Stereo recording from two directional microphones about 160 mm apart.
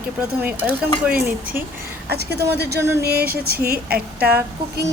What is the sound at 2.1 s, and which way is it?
Speech, 90° right.